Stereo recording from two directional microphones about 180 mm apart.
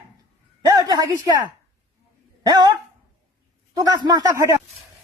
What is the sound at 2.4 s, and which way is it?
Speech, 25° right (ahead or behind).